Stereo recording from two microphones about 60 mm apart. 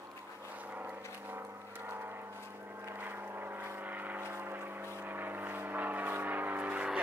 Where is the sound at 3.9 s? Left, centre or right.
Right.